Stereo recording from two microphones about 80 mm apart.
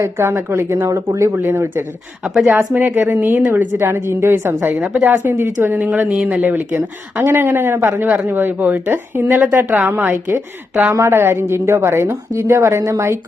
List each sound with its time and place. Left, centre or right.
0.0 s a woman's voice: right
2.2 s speech: centre
2.5 s a woman's voice: right